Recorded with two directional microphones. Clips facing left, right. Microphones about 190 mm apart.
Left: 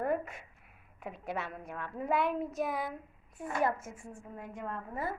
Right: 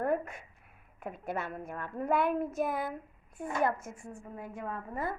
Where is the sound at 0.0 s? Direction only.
Centre (ahead or behind).